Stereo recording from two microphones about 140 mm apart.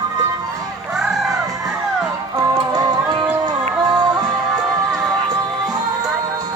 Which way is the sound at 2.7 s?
30° right (ahead or behind).